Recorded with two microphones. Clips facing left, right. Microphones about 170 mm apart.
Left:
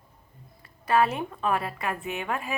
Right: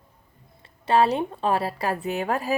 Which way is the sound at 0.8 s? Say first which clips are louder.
Right 3 dB; 30° right (ahead or behind).